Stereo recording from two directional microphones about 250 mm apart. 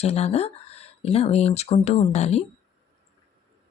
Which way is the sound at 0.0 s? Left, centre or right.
Left.